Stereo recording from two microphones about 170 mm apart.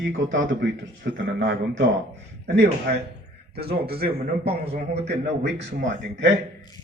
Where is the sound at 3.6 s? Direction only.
65° right (ahead or behind).